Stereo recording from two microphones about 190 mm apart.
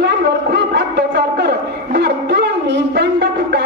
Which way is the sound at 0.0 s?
70° right (ahead or behind).